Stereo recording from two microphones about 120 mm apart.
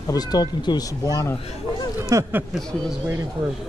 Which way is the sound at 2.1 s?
25° right (ahead or behind).